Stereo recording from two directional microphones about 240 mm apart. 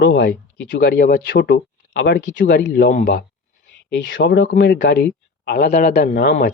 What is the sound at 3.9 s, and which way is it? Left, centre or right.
Speech, left.